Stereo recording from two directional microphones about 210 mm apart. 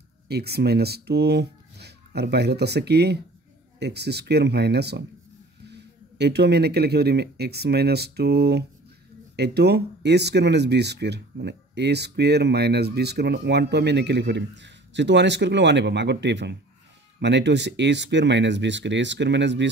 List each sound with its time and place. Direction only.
0.3 s speech: 50° right (ahead or behind)